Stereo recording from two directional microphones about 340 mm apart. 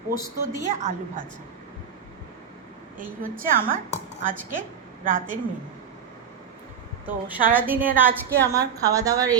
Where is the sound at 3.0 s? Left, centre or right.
Right.